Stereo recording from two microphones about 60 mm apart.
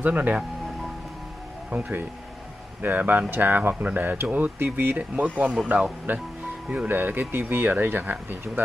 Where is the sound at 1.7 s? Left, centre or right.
Right.